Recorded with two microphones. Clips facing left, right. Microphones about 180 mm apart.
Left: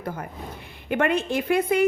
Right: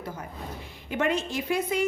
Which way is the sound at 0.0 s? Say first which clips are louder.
Left 4 dB; 55° left (ahead or behind).